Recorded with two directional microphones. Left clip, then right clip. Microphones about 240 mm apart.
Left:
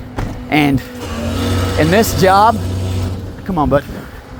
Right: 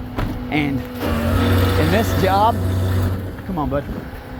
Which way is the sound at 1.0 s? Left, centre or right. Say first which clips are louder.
Right 1 dB; centre.